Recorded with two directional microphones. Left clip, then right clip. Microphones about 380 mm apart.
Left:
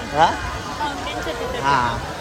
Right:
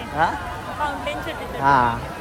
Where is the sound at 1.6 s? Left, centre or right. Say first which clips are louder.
Right 2 dB; centre.